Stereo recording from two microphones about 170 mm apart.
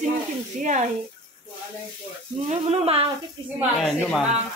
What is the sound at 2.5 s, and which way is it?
Speech, 35° right (ahead or behind).